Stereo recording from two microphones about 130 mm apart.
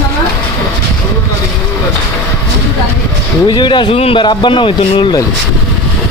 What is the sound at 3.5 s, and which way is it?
Speech, 35° left (ahead or behind).